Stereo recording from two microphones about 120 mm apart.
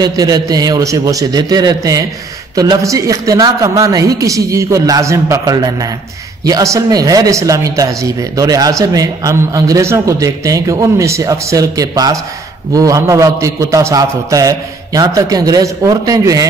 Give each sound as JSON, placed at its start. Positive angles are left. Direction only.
{"t": 0.0, "sound": "a man's voice", "side_deg": -30}